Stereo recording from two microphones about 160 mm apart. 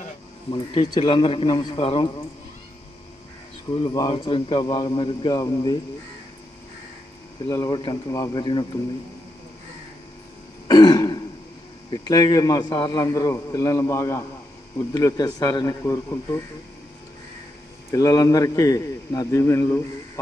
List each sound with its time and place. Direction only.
0.5 s a man's voice: 30° left (ahead or behind)
4.1 s a man's voice: 35° left (ahead or behind)
7.4 s a man's voice: 25° left (ahead or behind)
10.7 s throat clearing: 25° left (ahead or behind)
11.9 s a man's voice: 25° left (ahead or behind)
17.9 s a man's voice: 20° left (ahead or behind)